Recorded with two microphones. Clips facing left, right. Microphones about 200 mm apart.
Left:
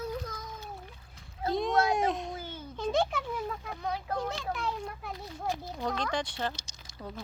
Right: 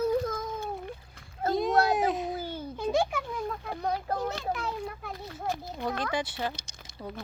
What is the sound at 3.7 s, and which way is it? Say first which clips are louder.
Speech: right 4 dB; 40° right (ahead or behind).